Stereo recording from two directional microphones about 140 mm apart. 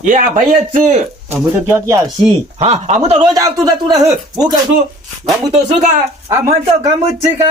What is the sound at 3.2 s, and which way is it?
Speech, 25° right (ahead or behind).